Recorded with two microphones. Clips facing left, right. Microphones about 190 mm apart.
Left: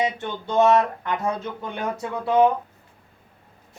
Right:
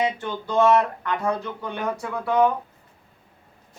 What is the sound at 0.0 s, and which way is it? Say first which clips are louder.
Speech: even; 20° left (ahead or behind).